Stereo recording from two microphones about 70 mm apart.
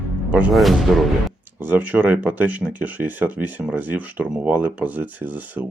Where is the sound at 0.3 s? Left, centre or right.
Right.